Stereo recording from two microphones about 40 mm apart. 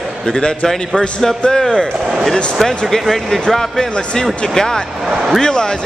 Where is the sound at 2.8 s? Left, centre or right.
Centre.